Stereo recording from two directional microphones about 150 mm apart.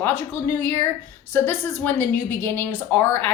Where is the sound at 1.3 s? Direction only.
15° left (ahead or behind).